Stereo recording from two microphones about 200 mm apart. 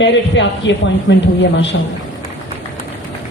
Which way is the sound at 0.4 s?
65° left (ahead or behind).